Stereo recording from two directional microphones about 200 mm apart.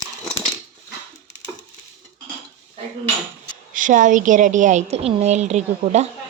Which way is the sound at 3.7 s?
40° right (ahead or behind).